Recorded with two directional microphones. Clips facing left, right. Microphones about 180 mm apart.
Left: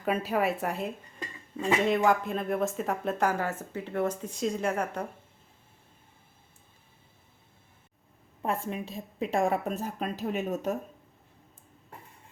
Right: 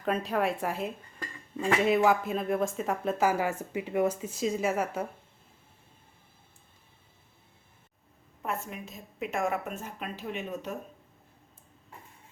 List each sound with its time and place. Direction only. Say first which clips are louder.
0.0 s speech: left 1 dB; 5° left (ahead or behind)
8.4 s a woman's voice: left 4 dB; 30° left (ahead or behind)